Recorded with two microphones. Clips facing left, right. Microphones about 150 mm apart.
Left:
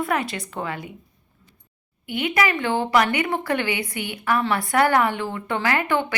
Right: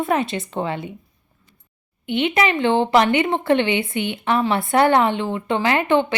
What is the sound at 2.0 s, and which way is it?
Speech, 25° right (ahead or behind).